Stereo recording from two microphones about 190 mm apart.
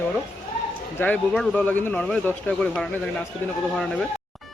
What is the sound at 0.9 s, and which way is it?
Speech, 5° left (ahead or behind).